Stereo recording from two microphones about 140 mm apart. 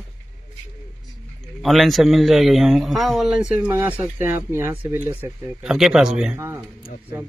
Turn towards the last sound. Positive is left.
turn(degrees=-20)  # may be behind; listen again after turning